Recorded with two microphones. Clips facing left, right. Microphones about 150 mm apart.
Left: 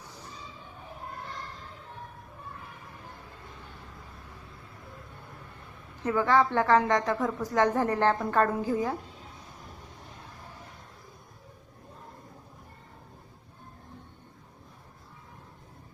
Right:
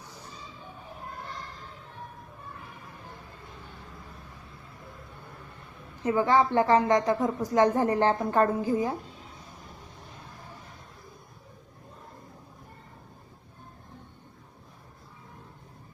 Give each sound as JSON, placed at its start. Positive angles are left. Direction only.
{"t": 6.1, "sound": "a woman's voice", "side_deg": -20}